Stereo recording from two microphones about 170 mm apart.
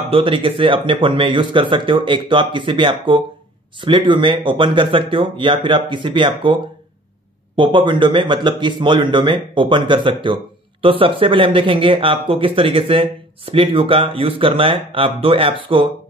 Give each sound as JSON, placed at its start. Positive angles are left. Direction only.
{"t": 0.1, "sound": "speech", "side_deg": -30}